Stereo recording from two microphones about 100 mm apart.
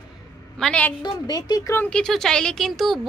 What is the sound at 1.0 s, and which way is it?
Speech, 40° left (ahead or behind).